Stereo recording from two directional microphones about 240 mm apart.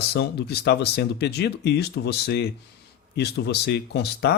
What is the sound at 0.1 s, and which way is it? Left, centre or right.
Speech, left.